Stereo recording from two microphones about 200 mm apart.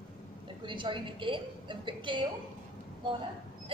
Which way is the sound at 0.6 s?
25° right (ahead or behind).